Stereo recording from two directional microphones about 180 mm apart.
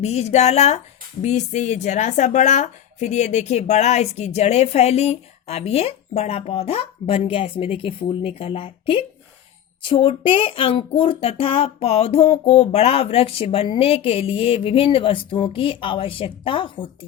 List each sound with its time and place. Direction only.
0.0 s speech: 35° left (ahead or behind)